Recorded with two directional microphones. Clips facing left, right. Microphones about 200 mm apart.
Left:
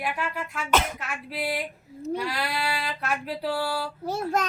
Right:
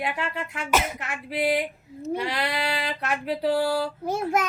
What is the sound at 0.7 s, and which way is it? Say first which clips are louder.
Speech: even; 10° right (ahead or behind).